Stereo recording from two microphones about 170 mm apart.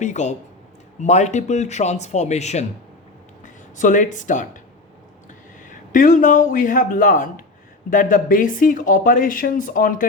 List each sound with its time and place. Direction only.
0.0 s speech: 45° left (ahead or behind)